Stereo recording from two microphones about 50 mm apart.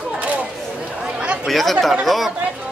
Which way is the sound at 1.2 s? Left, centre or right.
Right.